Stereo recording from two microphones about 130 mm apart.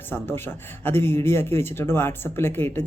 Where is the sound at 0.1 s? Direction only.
15° left (ahead or behind).